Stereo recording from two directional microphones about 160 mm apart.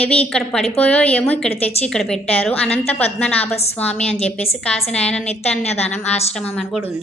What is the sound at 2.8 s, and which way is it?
Speech, 40° left (ahead or behind).